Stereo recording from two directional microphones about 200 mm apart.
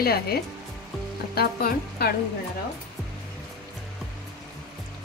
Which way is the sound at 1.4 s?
50° left (ahead or behind).